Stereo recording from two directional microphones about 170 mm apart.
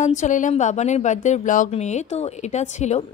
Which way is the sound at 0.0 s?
45° left (ahead or behind).